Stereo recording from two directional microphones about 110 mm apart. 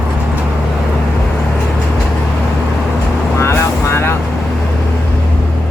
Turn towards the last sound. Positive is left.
turn(degrees=25)  # may be behind; listen again after turning